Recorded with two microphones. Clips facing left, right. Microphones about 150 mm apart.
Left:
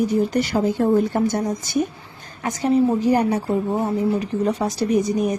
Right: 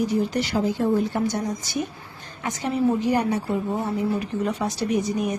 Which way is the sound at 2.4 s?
40° left (ahead or behind).